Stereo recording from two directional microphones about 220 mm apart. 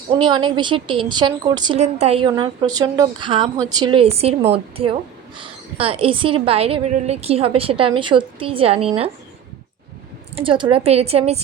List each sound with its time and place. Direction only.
0.1 s a woman's voice: 20° right (ahead or behind)
10.3 s a woman's voice: 25° right (ahead or behind)